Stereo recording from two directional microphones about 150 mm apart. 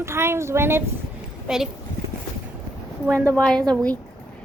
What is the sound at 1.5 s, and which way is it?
Speech, 5° right (ahead or behind).